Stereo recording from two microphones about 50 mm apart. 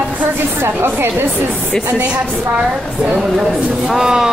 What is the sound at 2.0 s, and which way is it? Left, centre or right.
A woman's voice, right.